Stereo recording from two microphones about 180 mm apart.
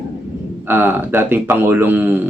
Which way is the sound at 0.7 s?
10° right (ahead or behind).